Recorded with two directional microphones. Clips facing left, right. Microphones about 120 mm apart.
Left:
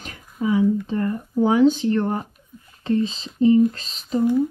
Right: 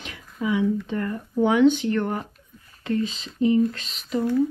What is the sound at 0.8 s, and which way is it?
Speech, 30° left (ahead or behind).